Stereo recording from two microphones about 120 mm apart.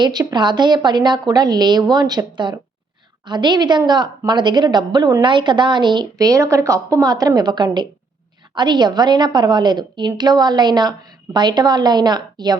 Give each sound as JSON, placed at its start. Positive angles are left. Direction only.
{"t": 0.0, "sound": "a woman's voice", "side_deg": -35}